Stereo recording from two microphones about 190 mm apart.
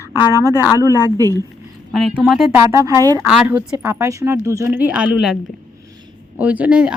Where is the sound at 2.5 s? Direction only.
15° right (ahead or behind).